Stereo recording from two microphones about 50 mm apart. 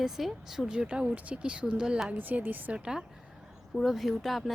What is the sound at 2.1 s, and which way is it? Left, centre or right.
Speech, right.